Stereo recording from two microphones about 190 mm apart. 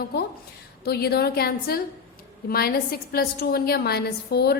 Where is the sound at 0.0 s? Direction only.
55° left (ahead or behind).